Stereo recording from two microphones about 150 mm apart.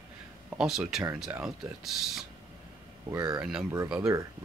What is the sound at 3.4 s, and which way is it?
Speech, 5° right (ahead or behind).